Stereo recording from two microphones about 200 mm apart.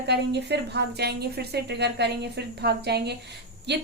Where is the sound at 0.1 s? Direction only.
60° right (ahead or behind).